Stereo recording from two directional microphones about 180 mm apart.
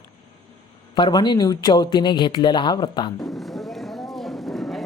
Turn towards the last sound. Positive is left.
turn(degrees=0)  # may be behind; listen again after turning